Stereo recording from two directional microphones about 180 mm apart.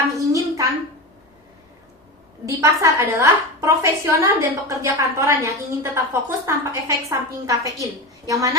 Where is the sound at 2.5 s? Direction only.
20° right (ahead or behind).